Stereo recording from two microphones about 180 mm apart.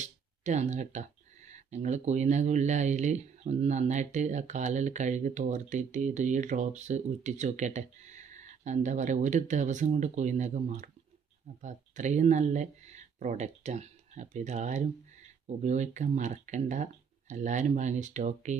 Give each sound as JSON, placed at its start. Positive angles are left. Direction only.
{"t": 0.0, "sound": "speech", "side_deg": -40}